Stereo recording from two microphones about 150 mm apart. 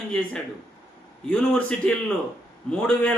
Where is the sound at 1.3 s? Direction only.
5° left (ahead or behind).